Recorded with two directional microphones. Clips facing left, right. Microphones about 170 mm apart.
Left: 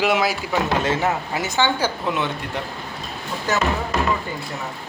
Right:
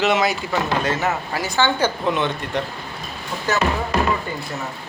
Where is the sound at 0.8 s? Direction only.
25° left (ahead or behind).